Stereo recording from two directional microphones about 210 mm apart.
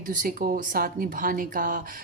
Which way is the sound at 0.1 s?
40° right (ahead or behind).